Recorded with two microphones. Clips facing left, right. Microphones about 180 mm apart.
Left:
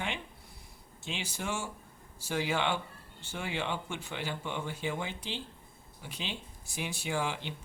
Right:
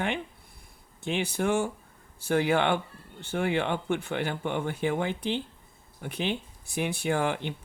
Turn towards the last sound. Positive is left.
turn(degrees=-55)  # may be behind; listen again after turning